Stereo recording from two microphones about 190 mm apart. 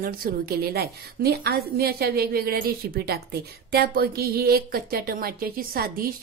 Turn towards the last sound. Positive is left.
turn(degrees=-50)  # may be behind; listen again after turning